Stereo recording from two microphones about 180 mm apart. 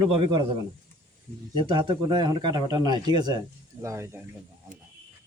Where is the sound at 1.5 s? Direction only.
30° right (ahead or behind).